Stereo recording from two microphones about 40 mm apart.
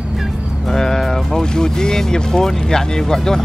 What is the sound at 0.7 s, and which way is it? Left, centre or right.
Speech, centre.